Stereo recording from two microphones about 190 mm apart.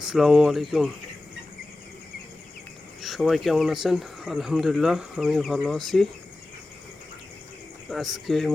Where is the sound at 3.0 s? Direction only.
Centre (ahead or behind).